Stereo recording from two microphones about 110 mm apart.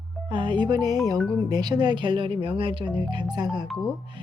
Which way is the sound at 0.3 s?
50° right (ahead or behind).